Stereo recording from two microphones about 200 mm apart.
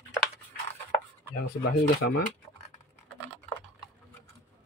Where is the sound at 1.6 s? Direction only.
45° left (ahead or behind).